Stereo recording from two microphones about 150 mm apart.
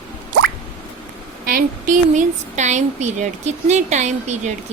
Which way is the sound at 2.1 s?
50° right (ahead or behind).